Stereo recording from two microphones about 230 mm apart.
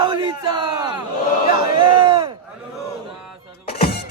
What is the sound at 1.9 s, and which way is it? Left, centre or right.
Crowd, right.